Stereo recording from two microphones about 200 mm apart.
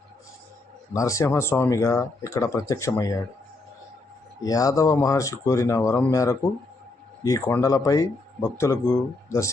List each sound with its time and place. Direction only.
0.9 s speech: 15° left (ahead or behind)
4.4 s speech: 15° left (ahead or behind)